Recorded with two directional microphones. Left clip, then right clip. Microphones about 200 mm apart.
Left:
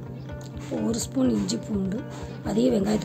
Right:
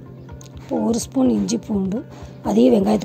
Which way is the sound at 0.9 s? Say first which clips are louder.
Right 6 dB; 25° right (ahead or behind).